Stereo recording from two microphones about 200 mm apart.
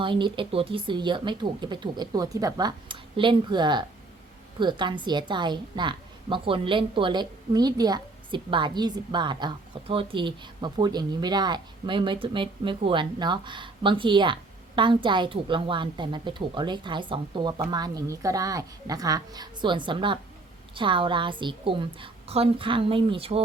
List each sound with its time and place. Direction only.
0.0 s a woman's voice: 25° right (ahead or behind)